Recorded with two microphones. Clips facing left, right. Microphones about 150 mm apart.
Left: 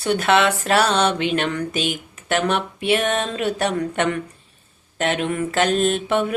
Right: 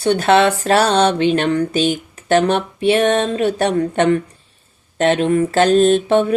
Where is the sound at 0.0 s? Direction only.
30° right (ahead or behind).